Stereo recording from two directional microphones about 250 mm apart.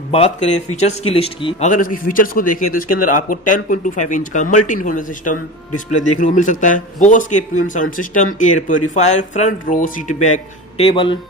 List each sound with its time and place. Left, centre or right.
0.1 s a man's voice: left